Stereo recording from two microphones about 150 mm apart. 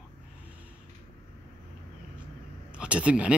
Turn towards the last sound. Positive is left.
turn(degrees=-10)  # may be behind; listen again after turning